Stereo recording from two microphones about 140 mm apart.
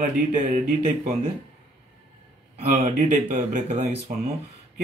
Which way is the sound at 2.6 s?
60° right (ahead or behind).